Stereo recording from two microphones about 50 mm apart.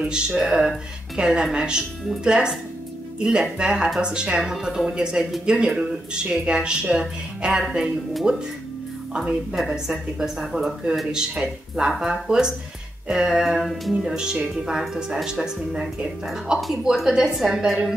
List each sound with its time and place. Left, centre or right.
0.0 s a woman's voice: centre